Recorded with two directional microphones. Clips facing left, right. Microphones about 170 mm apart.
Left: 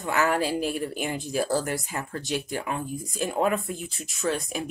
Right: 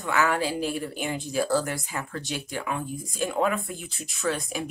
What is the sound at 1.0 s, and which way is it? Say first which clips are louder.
Speech: right 2 dB; 40° left (ahead or behind).